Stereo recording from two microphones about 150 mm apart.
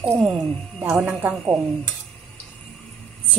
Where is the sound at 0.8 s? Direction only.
5° right (ahead or behind).